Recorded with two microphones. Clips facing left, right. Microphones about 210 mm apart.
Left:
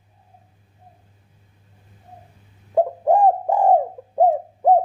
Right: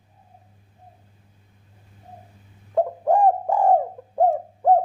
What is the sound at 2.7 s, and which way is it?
Bird, 20° left (ahead or behind).